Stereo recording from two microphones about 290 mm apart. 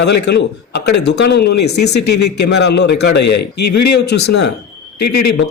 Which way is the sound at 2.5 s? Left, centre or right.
Left.